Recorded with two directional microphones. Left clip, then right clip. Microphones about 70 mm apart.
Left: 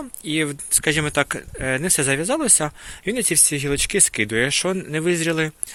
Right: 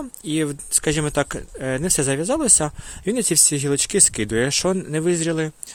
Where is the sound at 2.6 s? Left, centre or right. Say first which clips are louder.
Even; right.